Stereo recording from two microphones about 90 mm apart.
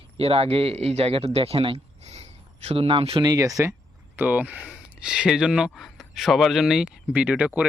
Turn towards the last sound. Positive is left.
turn(degrees=-15)  # may be behind; listen again after turning